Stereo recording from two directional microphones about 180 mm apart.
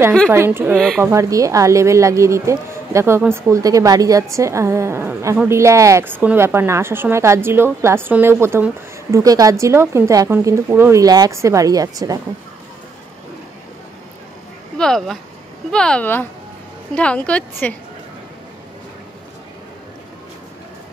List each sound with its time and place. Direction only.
0.3 s a woman's voice: 15° right (ahead or behind)
14.8 s a woman's voice: centre (ahead or behind)